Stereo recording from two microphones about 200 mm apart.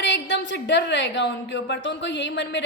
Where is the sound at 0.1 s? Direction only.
60° left (ahead or behind).